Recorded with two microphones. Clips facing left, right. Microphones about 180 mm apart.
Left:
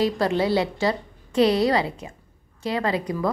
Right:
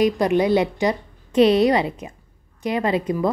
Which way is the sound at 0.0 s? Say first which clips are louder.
Right 4 dB; 15° right (ahead or behind).